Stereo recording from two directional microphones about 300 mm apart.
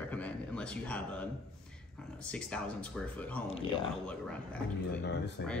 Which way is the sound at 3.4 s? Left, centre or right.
Centre.